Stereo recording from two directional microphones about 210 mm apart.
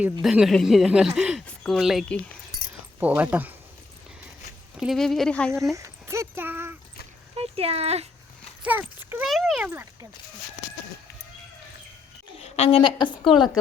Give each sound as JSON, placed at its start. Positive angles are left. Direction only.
{"t": 0.0, "sound": "speech", "side_deg": -5}
{"t": 4.8, "sound": "speech", "side_deg": 0}
{"t": 5.7, "sound": "a sound", "side_deg": -15}
{"t": 7.3, "sound": "speech", "side_deg": -30}
{"t": 8.6, "sound": "speech", "side_deg": -10}
{"t": 12.4, "sound": "a woman's voice", "side_deg": 30}